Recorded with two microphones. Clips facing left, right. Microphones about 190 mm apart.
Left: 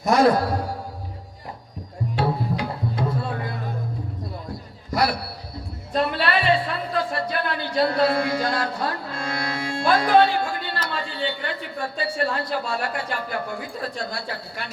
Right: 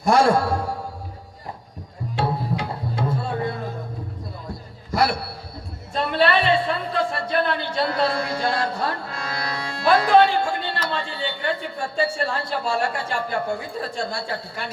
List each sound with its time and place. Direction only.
0.0 s a man's voice: 30° right (ahead or behind)
2.1 s music: 25° right (ahead or behind)
4.9 s a sound: 25° right (ahead or behind)
5.9 s a man's voice: 25° right (ahead or behind)
9.4 s music: 25° left (ahead or behind)
10.2 s a man's voice: 25° right (ahead or behind)